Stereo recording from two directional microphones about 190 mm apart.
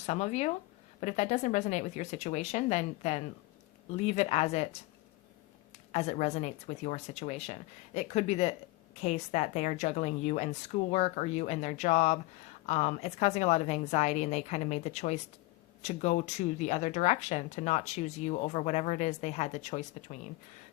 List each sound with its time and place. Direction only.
0.0 s speech: 35° left (ahead or behind)
5.9 s speech: 35° left (ahead or behind)